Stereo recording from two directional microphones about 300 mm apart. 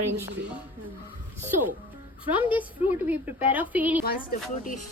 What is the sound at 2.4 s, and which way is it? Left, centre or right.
A woman's voice, centre.